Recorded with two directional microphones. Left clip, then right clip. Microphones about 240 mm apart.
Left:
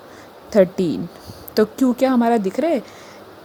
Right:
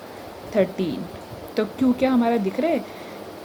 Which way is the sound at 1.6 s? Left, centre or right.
Left.